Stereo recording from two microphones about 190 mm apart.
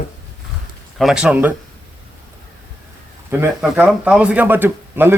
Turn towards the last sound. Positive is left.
turn(degrees=-10)  # may be behind; listen again after turning